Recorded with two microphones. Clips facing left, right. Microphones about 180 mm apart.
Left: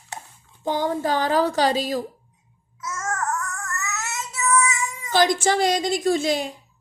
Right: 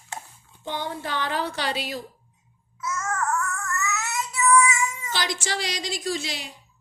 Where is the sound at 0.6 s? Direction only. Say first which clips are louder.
Left 8 dB; 40° left (ahead or behind).